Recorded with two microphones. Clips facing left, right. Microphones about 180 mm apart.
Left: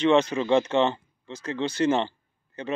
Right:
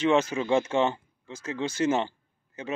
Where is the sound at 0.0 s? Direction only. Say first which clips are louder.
Left 3 dB; 5° right (ahead or behind).